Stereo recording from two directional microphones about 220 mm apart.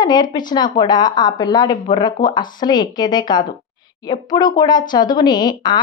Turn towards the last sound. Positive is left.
turn(degrees=20)  # may be behind; listen again after turning